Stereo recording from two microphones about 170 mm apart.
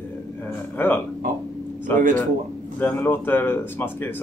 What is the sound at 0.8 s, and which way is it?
Speech, 10° left (ahead or behind).